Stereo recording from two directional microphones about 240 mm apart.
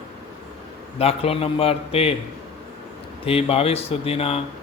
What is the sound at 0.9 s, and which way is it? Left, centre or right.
Speech, left.